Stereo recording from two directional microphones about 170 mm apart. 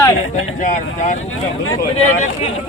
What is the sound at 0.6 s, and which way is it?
Speech, 45° left (ahead or behind).